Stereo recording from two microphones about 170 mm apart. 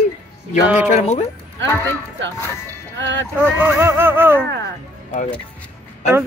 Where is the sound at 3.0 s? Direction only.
90° right.